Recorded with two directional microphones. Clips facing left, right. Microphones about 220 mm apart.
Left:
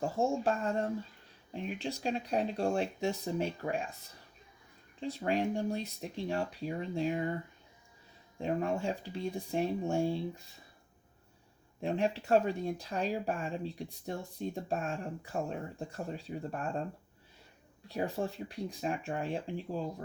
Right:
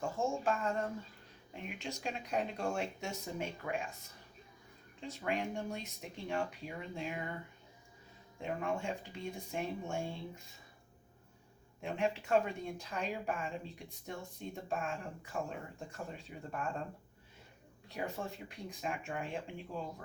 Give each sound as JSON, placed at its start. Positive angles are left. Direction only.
{"t": 0.0, "sound": "speech", "side_deg": 35}
{"t": 4.9, "sound": "speech", "side_deg": 35}
{"t": 8.4, "sound": "speech", "side_deg": 35}
{"t": 11.8, "sound": "speech", "side_deg": 35}
{"t": 17.8, "sound": "speech", "side_deg": 35}